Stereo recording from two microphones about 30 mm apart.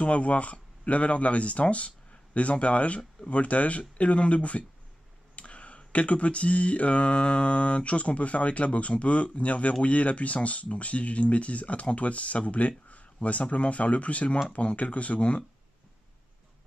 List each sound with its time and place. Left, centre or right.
0.0 s speech: left